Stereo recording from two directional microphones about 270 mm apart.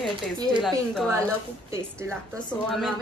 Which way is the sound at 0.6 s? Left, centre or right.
Centre.